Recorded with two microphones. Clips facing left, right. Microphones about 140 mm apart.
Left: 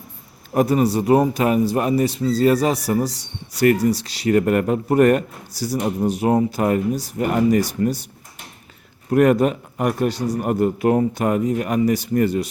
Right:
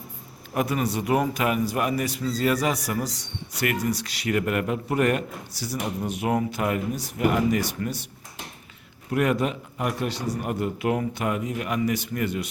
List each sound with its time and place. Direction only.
0.5 s a man's voice: 40° left (ahead or behind)
9.0 s a man's voice: 45° left (ahead or behind)